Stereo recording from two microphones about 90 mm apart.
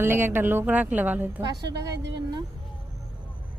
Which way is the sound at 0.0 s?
25° right (ahead or behind).